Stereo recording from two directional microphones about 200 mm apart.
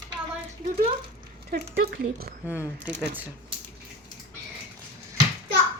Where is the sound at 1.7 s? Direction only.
55° right (ahead or behind).